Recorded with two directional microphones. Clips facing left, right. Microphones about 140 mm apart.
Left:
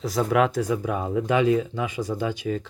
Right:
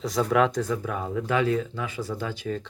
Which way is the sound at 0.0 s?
Centre (ahead or behind).